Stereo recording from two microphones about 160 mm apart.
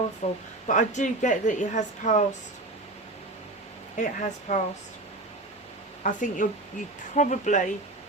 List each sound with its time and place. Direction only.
0.2 s a woman's voice: 40° left (ahead or behind)
3.9 s a woman's voice: 50° left (ahead or behind)
6.0 s a woman's voice: 55° left (ahead or behind)